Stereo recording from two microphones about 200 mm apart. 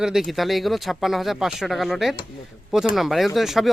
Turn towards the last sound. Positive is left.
turn(degrees=0)  # may be behind; listen again after turning